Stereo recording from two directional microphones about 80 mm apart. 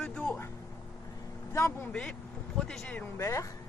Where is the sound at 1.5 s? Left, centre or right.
Left.